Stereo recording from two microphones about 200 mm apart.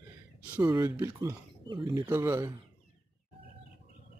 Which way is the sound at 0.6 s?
20° right (ahead or behind).